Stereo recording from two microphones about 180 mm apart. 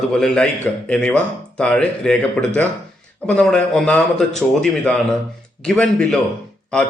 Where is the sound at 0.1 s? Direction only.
5° left (ahead or behind).